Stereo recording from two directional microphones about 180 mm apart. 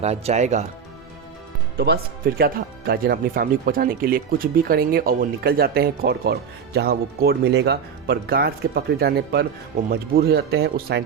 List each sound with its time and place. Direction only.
0.0 s speech: 35° right (ahead or behind)
1.8 s speech: 60° right (ahead or behind)